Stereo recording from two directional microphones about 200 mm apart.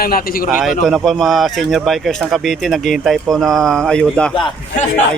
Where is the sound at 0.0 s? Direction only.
50° left (ahead or behind).